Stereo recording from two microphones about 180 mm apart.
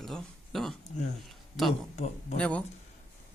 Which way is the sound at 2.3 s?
5° left (ahead or behind).